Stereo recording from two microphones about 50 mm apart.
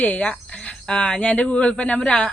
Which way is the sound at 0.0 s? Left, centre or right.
Left.